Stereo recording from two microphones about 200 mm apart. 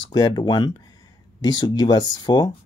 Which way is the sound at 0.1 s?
20° left (ahead or behind).